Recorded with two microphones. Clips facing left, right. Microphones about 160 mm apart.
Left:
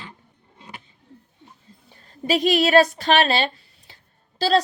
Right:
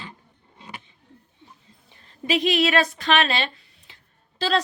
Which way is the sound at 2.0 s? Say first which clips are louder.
Left 2 dB; 40° left (ahead or behind).